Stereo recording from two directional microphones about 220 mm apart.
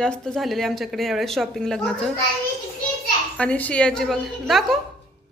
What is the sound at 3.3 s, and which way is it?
A woman's voice, 5° left (ahead or behind).